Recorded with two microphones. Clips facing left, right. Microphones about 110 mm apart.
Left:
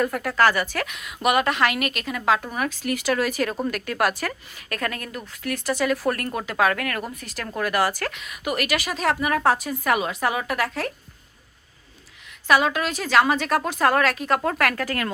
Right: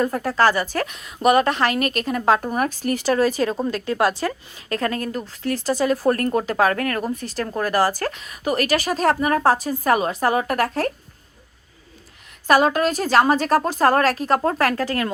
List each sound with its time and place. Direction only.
0.0 s a woman's voice: 30° right (ahead or behind)
12.5 s a woman's voice: 40° right (ahead or behind)